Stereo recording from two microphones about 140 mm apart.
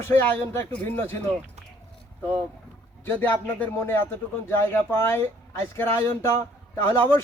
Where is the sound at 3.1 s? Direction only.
15° left (ahead or behind).